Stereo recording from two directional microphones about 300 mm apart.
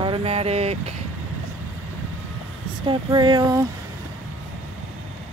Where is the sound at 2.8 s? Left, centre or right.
Centre.